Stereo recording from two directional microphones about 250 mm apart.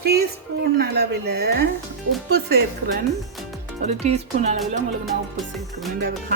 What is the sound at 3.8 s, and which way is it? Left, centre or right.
Speech, right.